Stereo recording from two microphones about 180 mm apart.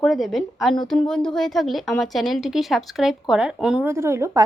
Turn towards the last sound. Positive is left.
turn(degrees=-15)  # may be behind; listen again after turning